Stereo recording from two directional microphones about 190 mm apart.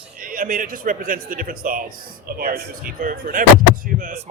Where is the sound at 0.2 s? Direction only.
45° right (ahead or behind).